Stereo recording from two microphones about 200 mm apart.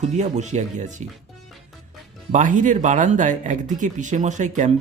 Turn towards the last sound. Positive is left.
turn(degrees=-35)  # may be behind; listen again after turning